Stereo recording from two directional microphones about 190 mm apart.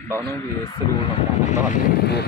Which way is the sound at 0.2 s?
15° left (ahead or behind).